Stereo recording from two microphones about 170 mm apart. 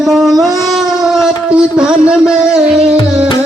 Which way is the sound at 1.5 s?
5° right (ahead or behind).